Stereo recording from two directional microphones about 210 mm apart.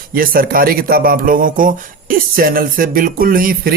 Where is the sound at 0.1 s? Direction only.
45° right (ahead or behind).